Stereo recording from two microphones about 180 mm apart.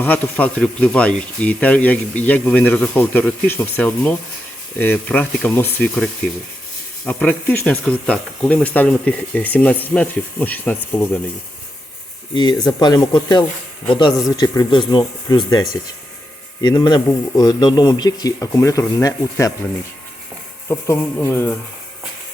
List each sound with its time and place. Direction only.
0.0 s speech: 10° left (ahead or behind)
12.3 s a man's voice: 25° left (ahead or behind)
20.7 s speech: 15° left (ahead or behind)